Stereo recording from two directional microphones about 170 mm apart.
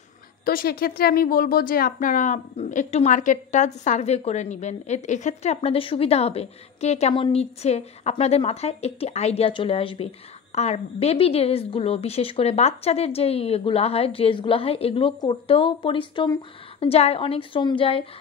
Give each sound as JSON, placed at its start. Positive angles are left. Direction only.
{"t": 0.5, "sound": "a woman's voice", "side_deg": 60}